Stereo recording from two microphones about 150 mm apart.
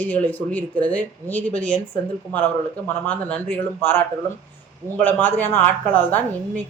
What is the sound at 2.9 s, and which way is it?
Speech, 10° left (ahead or behind).